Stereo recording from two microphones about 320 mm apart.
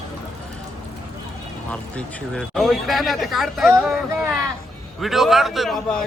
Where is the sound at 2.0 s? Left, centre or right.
Centre.